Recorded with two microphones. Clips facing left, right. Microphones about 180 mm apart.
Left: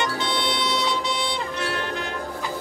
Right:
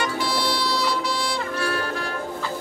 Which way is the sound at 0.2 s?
20° left (ahead or behind).